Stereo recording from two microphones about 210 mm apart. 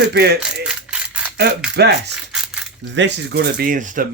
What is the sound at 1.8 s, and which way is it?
Speech, 50° right (ahead or behind).